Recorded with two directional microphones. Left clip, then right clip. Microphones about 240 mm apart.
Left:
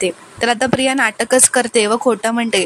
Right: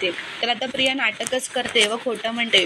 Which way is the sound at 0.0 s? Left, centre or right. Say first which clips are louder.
Left 6 dB; left.